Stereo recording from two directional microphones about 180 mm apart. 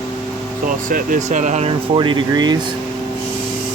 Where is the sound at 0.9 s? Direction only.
45° right (ahead or behind).